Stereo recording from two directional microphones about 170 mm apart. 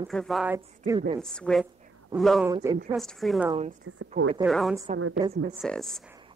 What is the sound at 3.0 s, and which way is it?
Speech, centre (ahead or behind).